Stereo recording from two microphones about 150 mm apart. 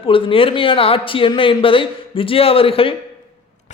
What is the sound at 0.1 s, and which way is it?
Speech, 35° left (ahead or behind).